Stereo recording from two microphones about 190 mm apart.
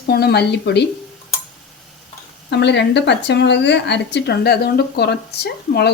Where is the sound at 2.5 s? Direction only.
65° left (ahead or behind).